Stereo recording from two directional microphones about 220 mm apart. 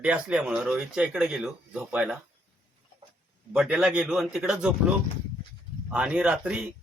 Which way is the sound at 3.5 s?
5° right (ahead or behind).